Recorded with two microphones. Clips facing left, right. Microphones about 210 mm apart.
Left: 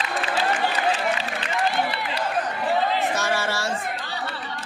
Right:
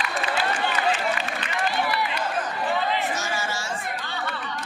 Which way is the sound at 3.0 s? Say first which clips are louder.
Left 4 dB; 60° left (ahead or behind).